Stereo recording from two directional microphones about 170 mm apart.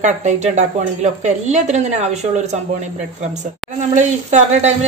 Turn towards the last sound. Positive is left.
turn(degrees=-40)  # may be behind; listen again after turning